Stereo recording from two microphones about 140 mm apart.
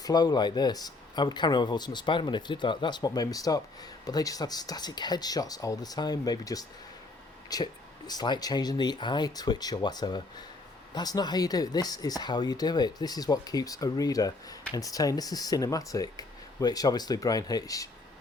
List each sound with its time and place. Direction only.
0.0 s speech: 30° left (ahead or behind)